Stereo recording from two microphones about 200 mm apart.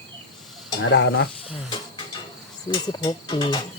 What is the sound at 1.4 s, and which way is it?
Snake, 25° left (ahead or behind).